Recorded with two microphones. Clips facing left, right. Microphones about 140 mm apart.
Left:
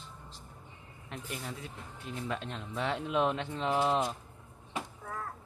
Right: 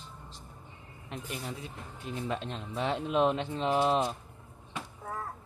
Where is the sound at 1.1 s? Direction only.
20° right (ahead or behind).